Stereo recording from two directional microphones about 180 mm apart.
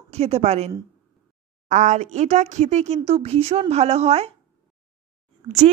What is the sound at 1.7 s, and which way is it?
Speech, 45° right (ahead or behind).